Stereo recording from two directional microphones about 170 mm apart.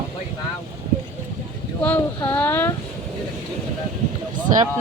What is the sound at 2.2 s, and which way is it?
Speech, 15° left (ahead or behind).